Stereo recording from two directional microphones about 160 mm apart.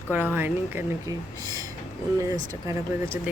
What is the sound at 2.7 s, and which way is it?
Speech, 15° right (ahead or behind).